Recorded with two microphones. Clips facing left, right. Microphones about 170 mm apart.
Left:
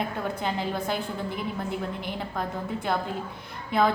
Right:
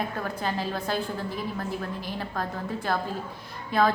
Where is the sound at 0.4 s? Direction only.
20° left (ahead or behind).